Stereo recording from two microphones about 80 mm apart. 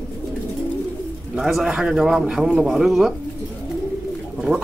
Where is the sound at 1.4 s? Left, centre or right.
Centre.